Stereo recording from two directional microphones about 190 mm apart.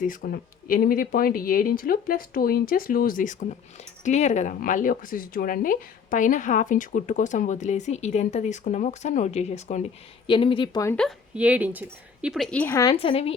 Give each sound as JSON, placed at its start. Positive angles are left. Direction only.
{"t": 0.0, "sound": "speech", "side_deg": 50}
{"t": 10.2, "sound": "speech", "side_deg": 25}
{"t": 10.8, "sound": "a woman's voice", "side_deg": 5}
{"t": 11.3, "sound": "a woman's voice", "side_deg": -5}
{"t": 13.0, "sound": "speech", "side_deg": 30}